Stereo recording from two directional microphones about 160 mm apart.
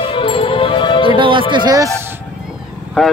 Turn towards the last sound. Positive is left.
turn(degrees=0)  # may be behind; listen again after turning